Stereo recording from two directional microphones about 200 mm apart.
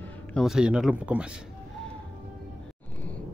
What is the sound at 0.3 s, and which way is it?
Speech, centre (ahead or behind).